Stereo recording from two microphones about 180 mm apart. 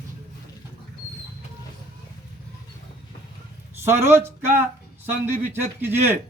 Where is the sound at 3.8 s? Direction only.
15° right (ahead or behind).